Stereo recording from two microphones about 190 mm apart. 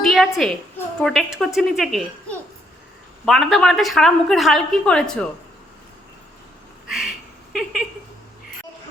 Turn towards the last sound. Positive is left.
turn(degrees=-5)  # may be behind; listen again after turning